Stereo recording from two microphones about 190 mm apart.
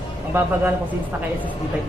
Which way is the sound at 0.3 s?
10° right (ahead or behind).